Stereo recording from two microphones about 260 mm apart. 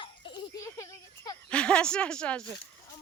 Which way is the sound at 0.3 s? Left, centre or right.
Centre.